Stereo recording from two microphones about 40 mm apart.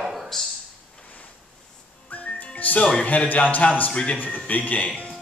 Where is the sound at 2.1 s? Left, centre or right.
Left.